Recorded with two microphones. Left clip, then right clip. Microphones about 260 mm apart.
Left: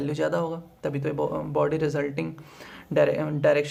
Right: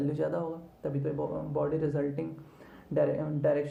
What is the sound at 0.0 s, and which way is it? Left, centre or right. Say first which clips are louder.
Speech: left 5 dB; left.